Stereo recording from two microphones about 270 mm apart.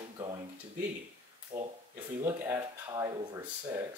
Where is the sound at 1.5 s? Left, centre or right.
Centre.